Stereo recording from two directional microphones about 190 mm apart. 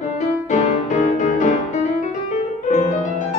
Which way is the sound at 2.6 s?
40° left (ahead or behind).